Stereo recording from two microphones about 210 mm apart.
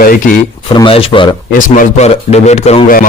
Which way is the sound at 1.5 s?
40° left (ahead or behind).